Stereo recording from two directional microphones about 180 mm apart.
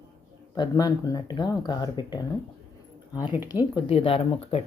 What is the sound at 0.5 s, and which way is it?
Speech, 20° left (ahead or behind).